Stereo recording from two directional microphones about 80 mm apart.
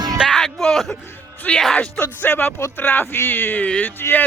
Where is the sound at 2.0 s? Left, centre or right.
Left.